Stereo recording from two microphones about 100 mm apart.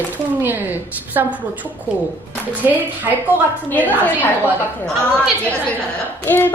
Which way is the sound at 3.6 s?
15° left (ahead or behind).